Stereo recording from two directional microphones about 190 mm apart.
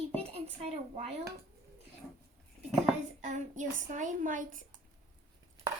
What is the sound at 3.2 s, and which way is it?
A woman's voice, 40° right (ahead or behind).